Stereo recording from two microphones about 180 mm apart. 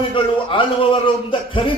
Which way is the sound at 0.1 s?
30° left (ahead or behind).